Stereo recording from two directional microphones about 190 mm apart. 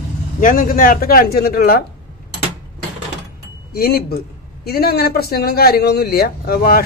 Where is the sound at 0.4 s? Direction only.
45° left (ahead or behind).